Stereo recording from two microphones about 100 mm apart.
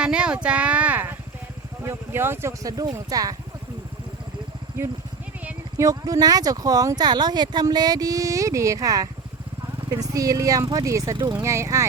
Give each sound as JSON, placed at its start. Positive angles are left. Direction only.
{"t": 0.0, "sound": "speech", "side_deg": -10}
{"t": 5.7, "sound": "speech", "side_deg": -35}